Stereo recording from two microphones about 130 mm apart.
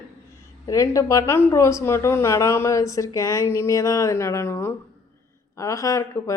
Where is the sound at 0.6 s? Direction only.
25° left (ahead or behind).